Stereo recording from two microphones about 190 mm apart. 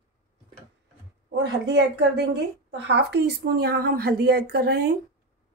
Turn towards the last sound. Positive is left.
turn(degrees=-55)  # may be behind; listen again after turning